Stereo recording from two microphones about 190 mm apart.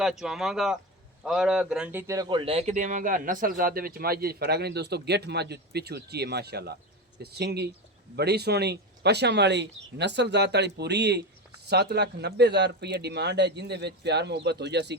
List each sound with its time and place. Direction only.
0.0 s speech: centre (ahead or behind)
2.4 s speech: 30° right (ahead or behind); by 14.9 s 65° right (ahead or behind)